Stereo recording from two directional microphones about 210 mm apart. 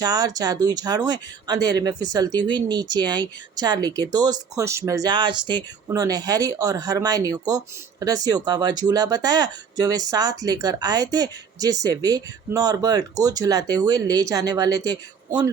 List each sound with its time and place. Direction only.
0.0 s speech: 20° right (ahead or behind)